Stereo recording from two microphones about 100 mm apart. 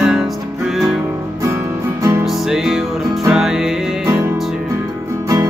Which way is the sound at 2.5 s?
5° right (ahead or behind).